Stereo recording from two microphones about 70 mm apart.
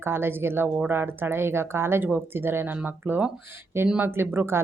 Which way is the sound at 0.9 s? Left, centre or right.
Right.